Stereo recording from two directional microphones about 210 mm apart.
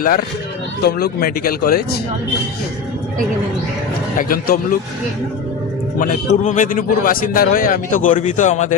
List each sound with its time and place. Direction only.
0.8 s speech: 50° left (ahead or behind)
4.2 s speech: 45° left (ahead or behind)
6.0 s a man's voice: 40° left (ahead or behind)